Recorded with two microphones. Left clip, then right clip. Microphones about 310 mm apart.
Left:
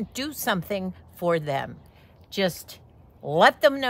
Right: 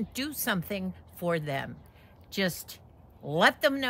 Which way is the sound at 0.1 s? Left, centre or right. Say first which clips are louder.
Left 6 dB; centre.